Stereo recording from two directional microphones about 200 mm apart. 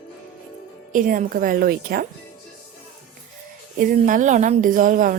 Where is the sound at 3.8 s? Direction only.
40° right (ahead or behind).